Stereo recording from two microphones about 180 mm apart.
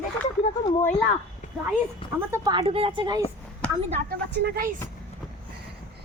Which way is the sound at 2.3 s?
20° right (ahead or behind).